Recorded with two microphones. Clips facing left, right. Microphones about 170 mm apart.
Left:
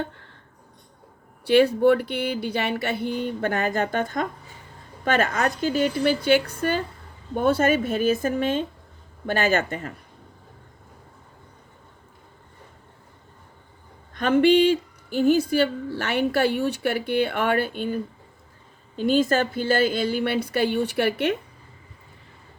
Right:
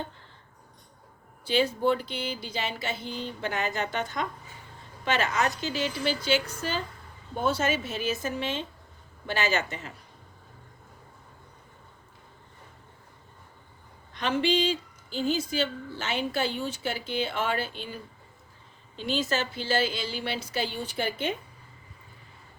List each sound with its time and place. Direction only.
1.5 s a woman's voice: 65° left (ahead or behind)
14.1 s a woman's voice: 50° left (ahead or behind); by 21.3 s 70° left (ahead or behind)